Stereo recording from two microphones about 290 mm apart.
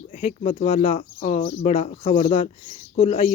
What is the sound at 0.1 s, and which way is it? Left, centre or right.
Speech, left.